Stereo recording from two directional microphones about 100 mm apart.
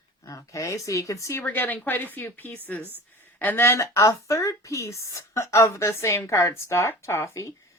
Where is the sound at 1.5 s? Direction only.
15° left (ahead or behind).